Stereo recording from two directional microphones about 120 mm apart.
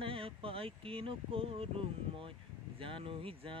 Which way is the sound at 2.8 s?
50° right (ahead or behind).